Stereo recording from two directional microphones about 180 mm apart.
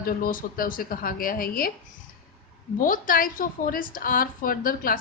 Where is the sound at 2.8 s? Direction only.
50° left (ahead or behind).